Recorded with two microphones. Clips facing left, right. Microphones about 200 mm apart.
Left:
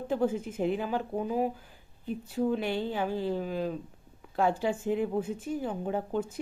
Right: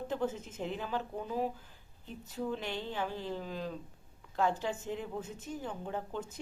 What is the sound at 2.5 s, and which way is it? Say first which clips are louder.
Speech: left 8 dB; 10° left (ahead or behind).